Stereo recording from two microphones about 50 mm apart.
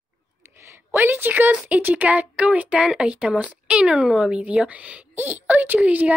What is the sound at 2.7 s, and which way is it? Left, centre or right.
A woman's voice, centre.